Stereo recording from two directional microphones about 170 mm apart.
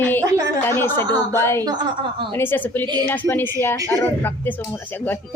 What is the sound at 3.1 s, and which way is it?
Speech, 10° left (ahead or behind).